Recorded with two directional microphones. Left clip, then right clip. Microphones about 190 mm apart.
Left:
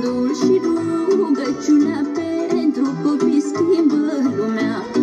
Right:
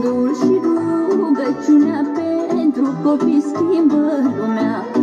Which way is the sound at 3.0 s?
30° right (ahead or behind).